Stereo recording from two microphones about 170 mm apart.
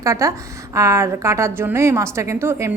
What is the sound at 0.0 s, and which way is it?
A woman's voice, 15° right (ahead or behind).